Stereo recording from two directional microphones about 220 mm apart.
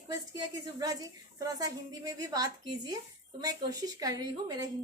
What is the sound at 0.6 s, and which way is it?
Speech, 15° right (ahead or behind).